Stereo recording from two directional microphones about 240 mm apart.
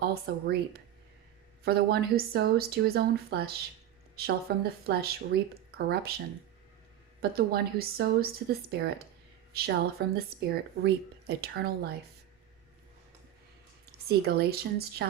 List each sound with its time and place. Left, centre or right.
0.0 s speech: right
7.2 s a woman's voice: right
14.1 s speech: right